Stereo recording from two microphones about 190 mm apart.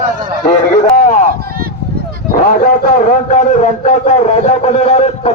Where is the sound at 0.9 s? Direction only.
40° left (ahead or behind).